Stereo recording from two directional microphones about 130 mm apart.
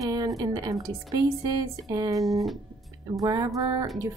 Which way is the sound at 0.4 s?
25° right (ahead or behind).